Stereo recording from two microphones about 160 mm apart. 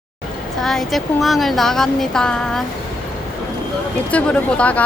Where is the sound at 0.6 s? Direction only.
Centre (ahead or behind).